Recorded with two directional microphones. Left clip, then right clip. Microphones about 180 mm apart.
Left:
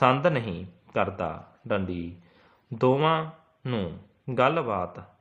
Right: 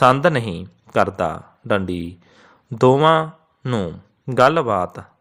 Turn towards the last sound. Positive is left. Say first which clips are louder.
# right 9 dB
turn(degrees=-40)  # may be behind; listen again after turning